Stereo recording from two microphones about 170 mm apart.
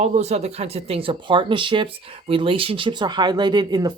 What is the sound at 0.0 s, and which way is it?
Speech, 40° right (ahead or behind).